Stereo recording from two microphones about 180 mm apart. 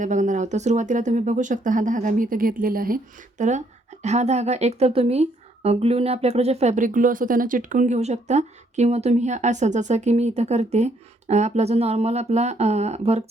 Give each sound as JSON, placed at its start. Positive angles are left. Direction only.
{"t": 0.0, "sound": "speech", "side_deg": -45}